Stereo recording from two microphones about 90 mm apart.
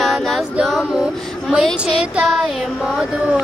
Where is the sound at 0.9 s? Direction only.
10° right (ahead or behind).